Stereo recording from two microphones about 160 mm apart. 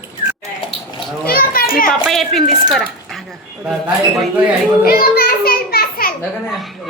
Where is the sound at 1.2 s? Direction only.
70° left (ahead or behind).